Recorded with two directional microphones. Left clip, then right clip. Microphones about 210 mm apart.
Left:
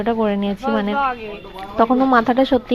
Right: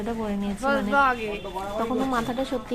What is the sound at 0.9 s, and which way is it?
Speech, 15° right (ahead or behind).